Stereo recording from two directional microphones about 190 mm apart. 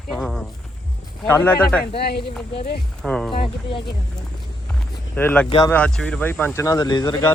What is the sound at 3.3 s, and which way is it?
Speech, 25° left (ahead or behind).